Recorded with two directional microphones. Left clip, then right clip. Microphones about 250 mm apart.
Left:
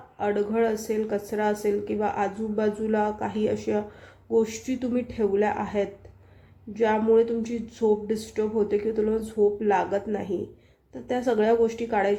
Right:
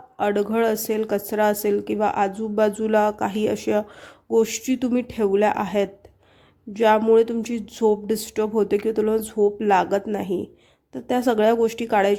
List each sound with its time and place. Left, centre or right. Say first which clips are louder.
0.2 s speech: right 3 dB; right